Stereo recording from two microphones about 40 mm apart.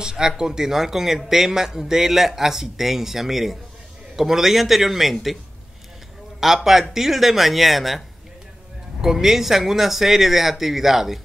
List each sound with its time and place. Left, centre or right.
0.0 s speech: centre
6.4 s speech: centre
9.0 s speech: centre